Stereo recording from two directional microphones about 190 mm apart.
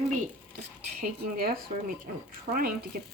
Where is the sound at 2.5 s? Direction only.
50° right (ahead or behind).